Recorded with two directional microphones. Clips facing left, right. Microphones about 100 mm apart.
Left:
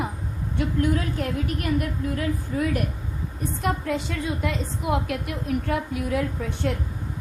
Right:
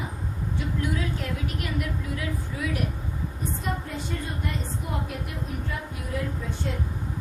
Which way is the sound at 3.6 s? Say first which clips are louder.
Left 9 dB; 90° left.